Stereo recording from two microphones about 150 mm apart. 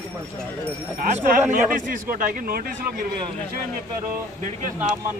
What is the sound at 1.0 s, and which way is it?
Speech, 50° right (ahead or behind).